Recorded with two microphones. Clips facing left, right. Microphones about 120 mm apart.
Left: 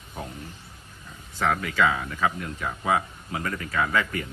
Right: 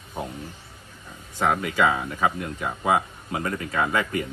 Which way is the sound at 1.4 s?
20° right (ahead or behind).